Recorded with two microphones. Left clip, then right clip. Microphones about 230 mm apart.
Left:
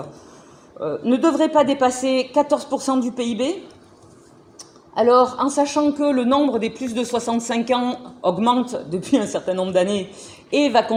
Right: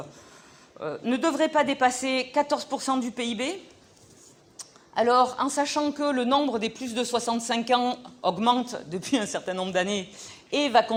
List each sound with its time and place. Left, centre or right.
0.9 s speech: right
4.5 s a sound: right
5.3 s speech: right